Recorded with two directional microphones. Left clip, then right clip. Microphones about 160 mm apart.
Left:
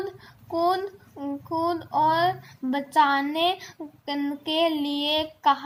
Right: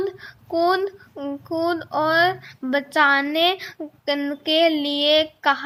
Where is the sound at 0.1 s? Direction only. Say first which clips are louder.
Right 5 dB; 35° right (ahead or behind).